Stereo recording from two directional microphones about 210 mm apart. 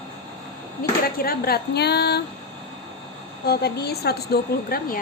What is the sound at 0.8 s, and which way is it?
A woman's voice, 45° left (ahead or behind).